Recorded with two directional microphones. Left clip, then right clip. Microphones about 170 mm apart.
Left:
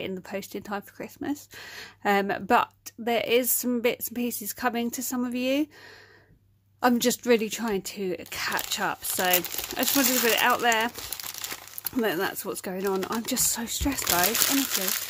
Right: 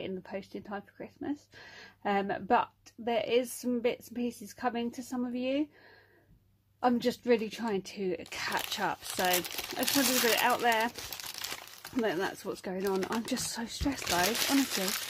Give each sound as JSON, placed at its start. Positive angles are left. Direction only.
{"t": 0.0, "sound": "speech", "side_deg": 25}
{"t": 6.8, "sound": "speech", "side_deg": 30}
{"t": 9.9, "sound": "speech", "side_deg": 15}